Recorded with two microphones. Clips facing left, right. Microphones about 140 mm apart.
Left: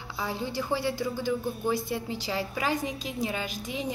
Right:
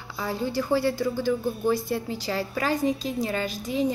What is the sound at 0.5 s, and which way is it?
A woman's voice, 15° left (ahead or behind).